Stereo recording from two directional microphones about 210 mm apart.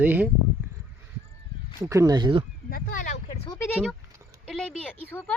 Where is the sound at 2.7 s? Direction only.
40° left (ahead or behind).